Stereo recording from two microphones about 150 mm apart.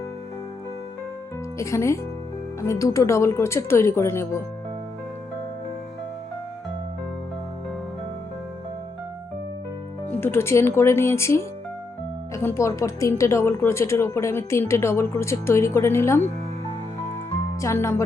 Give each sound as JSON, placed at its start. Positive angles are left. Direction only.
{"t": 1.5, "sound": "speech", "side_deg": 20}
{"t": 10.1, "sound": "speech", "side_deg": 15}
{"t": 17.6, "sound": "speech", "side_deg": 20}